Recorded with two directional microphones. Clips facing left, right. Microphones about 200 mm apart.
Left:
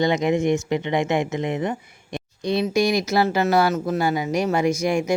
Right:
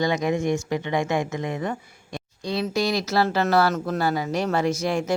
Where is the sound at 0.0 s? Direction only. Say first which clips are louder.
Left 3 dB; 20° left (ahead or behind).